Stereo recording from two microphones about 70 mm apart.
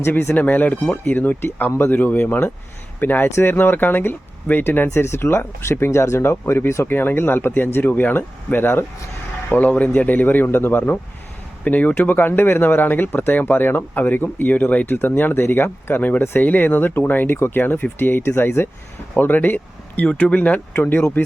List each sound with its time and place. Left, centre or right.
0.0 s speech: left
0.3 s speech: left
20.1 s speech: centre